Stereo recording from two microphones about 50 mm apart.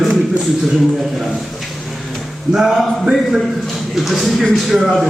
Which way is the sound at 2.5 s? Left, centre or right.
Centre.